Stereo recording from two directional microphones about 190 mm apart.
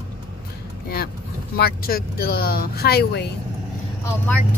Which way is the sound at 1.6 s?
50° left (ahead or behind).